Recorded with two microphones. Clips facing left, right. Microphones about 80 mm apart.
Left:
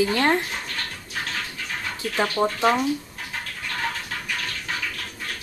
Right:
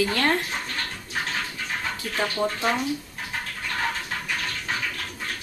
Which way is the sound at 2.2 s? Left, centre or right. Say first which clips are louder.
Left 4 dB; left.